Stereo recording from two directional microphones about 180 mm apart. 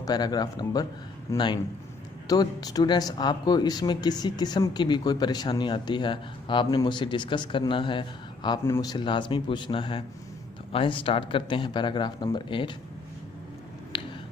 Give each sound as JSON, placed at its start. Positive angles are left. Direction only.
{"t": 0.0, "sound": "a man's voice", "side_deg": 20}
{"t": 8.6, "sound": "speech", "side_deg": 15}
{"t": 13.9, "sound": "a sound", "side_deg": 25}